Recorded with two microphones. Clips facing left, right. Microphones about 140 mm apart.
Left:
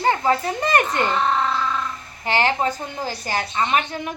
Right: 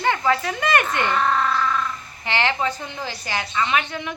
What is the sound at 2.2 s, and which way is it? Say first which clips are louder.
A woman's voice: left 3 dB; 40° left (ahead or behind).